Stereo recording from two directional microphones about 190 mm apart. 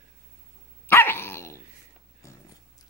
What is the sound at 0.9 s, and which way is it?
Dog, 10° left (ahead or behind).